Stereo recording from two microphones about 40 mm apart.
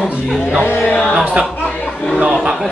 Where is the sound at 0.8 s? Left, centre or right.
Left.